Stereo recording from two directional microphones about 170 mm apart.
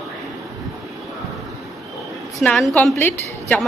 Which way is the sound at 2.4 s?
5° left (ahead or behind).